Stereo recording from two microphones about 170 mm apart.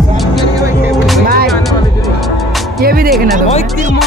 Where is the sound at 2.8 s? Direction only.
60° right (ahead or behind).